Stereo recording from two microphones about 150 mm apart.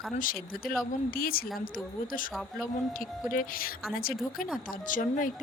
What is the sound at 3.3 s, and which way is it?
Speech, 70° left (ahead or behind).